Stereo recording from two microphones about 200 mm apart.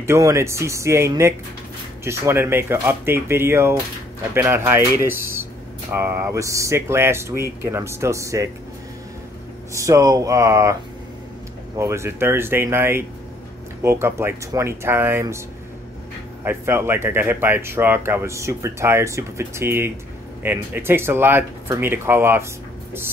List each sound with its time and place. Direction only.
0.0 s speech: 15° right (ahead or behind)
9.8 s speech: 15° right (ahead or behind)
11.8 s speech: 15° right (ahead or behind)
16.4 s speech: 10° right (ahead or behind)